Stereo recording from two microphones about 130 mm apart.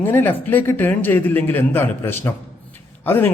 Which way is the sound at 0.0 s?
15° left (ahead or behind).